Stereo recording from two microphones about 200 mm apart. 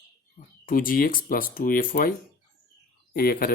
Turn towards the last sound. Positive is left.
turn(degrees=50)  # may be behind; listen again after turning